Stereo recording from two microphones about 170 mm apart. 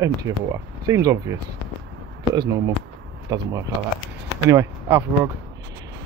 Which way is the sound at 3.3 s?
25° right (ahead or behind).